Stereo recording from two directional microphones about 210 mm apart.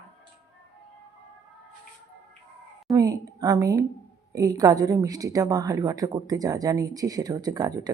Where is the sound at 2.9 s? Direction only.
15° right (ahead or behind).